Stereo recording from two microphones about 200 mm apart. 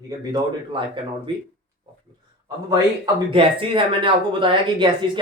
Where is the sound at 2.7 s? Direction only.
25° right (ahead or behind).